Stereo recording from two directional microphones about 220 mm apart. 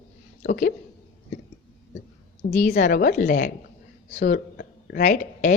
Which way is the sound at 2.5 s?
35° left (ahead or behind).